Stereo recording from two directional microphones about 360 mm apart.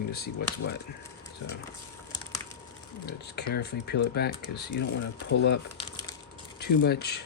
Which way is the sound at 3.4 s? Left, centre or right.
Left.